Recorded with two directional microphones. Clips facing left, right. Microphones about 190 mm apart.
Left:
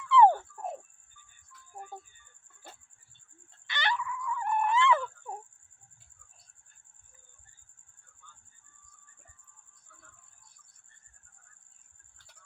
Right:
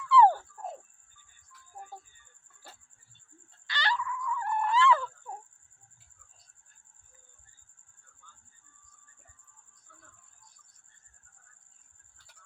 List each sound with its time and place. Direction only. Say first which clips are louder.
0.0 s frog: left 1 dB; 20° left (ahead or behind)
3.7 s wail: even; 20° left (ahead or behind)
5.3 s fowl: left 2 dB; 15° left (ahead or behind)